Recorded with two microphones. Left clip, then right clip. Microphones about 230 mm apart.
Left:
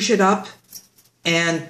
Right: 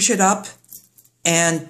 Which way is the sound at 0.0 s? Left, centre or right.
Right.